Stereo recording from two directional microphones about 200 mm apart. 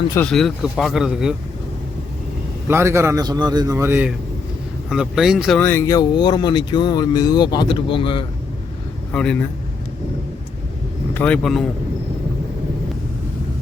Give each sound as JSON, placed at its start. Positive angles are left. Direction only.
{"t": 0.3, "sound": "a man's voice", "side_deg": 0}
{"t": 2.6, "sound": "a man's voice", "side_deg": -15}
{"t": 5.6, "sound": "speech", "side_deg": 15}
{"t": 9.1, "sound": "a man's voice", "side_deg": 5}
{"t": 11.1, "sound": "speech", "side_deg": 5}